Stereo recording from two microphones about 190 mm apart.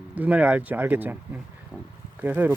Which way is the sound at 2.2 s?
10° right (ahead or behind).